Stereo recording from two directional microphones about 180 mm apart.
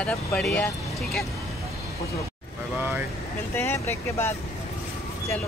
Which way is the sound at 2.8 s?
10° right (ahead or behind).